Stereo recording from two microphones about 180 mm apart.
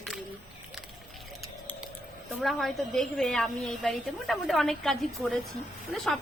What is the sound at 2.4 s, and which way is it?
A woman's voice, centre (ahead or behind).